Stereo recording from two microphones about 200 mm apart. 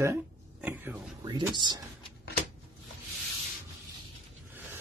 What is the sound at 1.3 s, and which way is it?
Speech, 20° right (ahead or behind).